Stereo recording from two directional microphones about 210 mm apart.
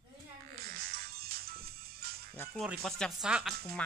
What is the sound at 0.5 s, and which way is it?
Music, 45° right (ahead or behind).